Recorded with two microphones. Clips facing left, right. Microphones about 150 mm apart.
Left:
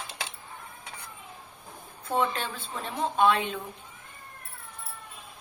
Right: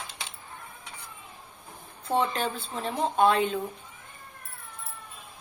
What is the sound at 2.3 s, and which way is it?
A woman's voice, 35° right (ahead or behind).